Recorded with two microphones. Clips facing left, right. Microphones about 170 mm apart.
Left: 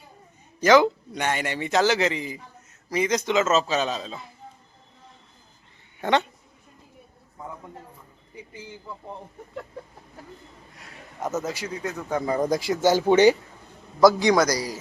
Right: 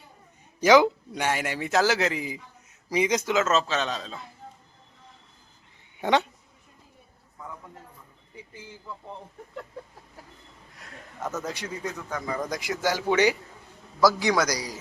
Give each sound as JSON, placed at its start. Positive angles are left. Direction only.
{"t": 0.6, "sound": "a man's voice", "side_deg": -10}
{"t": 6.0, "sound": "speech", "side_deg": -10}
{"t": 11.2, "sound": "a man's voice", "side_deg": 25}
{"t": 11.4, "sound": "a man's voice", "side_deg": 0}
{"t": 12.0, "sound": "speech", "side_deg": 30}
{"t": 14.3, "sound": "a man's voice", "side_deg": 10}